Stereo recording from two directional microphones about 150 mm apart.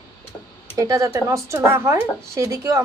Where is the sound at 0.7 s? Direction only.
20° right (ahead or behind).